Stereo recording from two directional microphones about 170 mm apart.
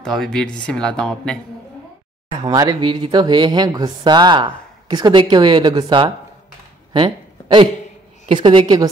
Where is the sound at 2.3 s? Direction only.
25° right (ahead or behind).